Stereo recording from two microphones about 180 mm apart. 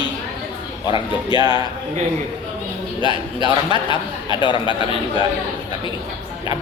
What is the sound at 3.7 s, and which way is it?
Speech, 25° left (ahead or behind).